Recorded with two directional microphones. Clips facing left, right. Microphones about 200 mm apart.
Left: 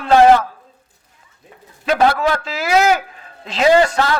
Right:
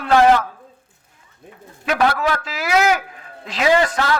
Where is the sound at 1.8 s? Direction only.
30° left (ahead or behind).